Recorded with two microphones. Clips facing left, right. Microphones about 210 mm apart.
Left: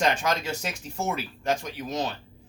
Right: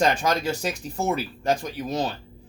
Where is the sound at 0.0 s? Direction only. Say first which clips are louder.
Right 3 dB; 35° right (ahead or behind).